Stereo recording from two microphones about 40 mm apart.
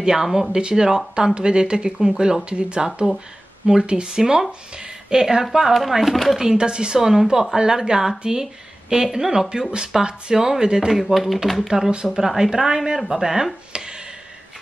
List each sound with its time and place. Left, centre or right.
0.0 s speech: centre
0.5 s speech: right
4.2 s speech: centre
6.3 s speech: centre
10.9 s speech: centre